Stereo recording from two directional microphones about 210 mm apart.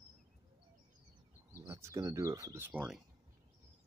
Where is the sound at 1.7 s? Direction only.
15° right (ahead or behind).